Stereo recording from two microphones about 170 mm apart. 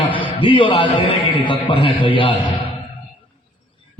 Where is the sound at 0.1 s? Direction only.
30° left (ahead or behind).